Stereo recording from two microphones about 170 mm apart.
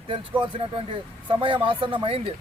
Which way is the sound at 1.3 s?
30° right (ahead or behind).